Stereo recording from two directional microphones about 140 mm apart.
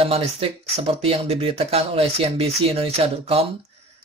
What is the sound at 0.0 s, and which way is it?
Speech, 45° right (ahead or behind).